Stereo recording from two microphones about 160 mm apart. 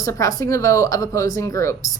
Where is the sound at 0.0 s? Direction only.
20° left (ahead or behind).